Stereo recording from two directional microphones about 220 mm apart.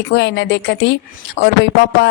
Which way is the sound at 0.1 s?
55° left (ahead or behind).